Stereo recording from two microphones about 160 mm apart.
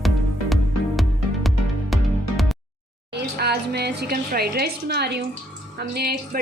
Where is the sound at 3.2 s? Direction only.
90° right.